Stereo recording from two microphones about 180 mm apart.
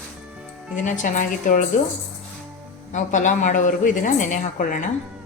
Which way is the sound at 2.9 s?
45° left (ahead or behind).